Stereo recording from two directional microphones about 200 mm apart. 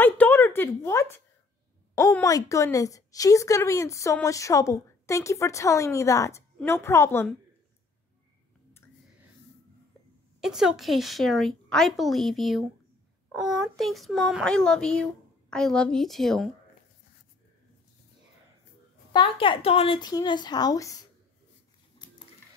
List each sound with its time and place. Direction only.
0.0 s a sound: 10° left (ahead or behind)
2.0 s a woman's voice: 15° left (ahead or behind)
10.4 s a woman's voice: centre (ahead or behind)
19.1 s a woman's voice: 25° left (ahead or behind)